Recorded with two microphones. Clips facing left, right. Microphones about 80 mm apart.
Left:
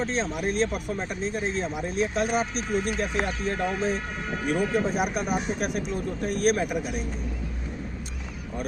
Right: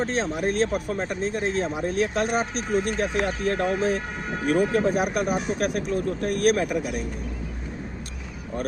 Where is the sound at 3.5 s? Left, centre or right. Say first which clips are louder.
Right 5 dB; right.